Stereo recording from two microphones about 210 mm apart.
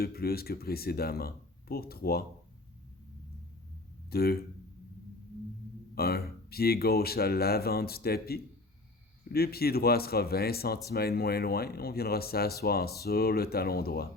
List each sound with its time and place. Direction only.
0.0 s speech: 45° left (ahead or behind)
4.1 s speech: 45° left (ahead or behind)
5.9 s speech: 45° left (ahead or behind)